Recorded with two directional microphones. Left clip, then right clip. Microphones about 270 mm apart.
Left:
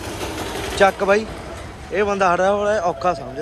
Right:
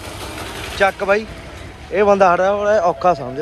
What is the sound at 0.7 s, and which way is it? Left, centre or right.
A man's voice, centre.